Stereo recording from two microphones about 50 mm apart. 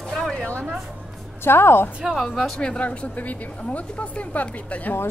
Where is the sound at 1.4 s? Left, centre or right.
Left.